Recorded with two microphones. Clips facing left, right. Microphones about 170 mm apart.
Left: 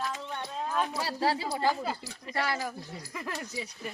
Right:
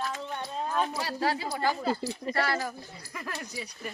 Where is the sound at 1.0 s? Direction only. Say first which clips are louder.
Even; 30° left (ahead or behind).